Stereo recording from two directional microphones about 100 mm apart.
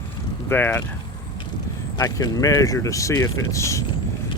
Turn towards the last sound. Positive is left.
turn(degrees=30)  # may be behind; listen again after turning